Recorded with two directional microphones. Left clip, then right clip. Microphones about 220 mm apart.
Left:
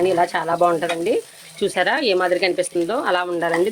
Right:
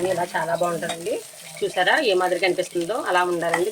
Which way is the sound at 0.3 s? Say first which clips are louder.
Left 5 dB; 50° left (ahead or behind).